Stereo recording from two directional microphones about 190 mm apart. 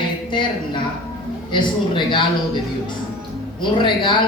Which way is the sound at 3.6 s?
25° left (ahead or behind).